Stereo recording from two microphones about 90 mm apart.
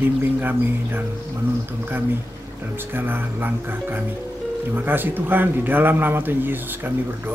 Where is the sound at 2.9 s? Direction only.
25° right (ahead or behind).